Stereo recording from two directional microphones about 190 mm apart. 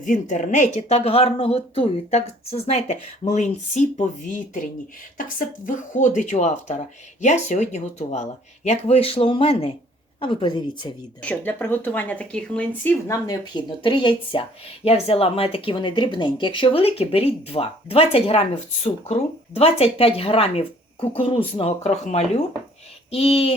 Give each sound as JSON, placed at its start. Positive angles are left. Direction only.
{"t": 0.0, "sound": "speech", "side_deg": 40}
{"t": 5.6, "sound": "speech", "side_deg": 40}
{"t": 11.2, "sound": "speech", "side_deg": 10}
{"t": 13.2, "sound": "speech", "side_deg": 25}